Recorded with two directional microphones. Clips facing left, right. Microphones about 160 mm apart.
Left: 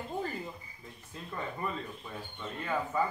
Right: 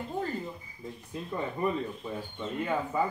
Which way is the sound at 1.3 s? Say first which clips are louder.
Right 6 dB; 20° right (ahead or behind).